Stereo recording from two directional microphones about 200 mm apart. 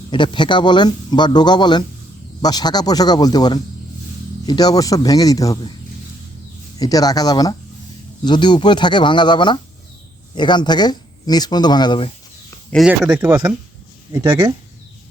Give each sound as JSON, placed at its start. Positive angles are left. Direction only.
{"t": 0.1, "sound": "speech", "side_deg": 25}
{"t": 6.7, "sound": "speech", "side_deg": 20}
{"t": 12.7, "sound": "speech", "side_deg": -5}